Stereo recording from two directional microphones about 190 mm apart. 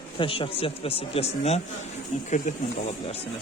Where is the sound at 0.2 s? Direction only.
25° left (ahead or behind).